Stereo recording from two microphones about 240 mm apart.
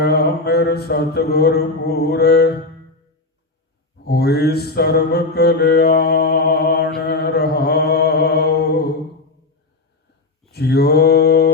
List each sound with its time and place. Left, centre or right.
0.0 s mantra: left
4.0 s mantra: left
10.5 s mantra: left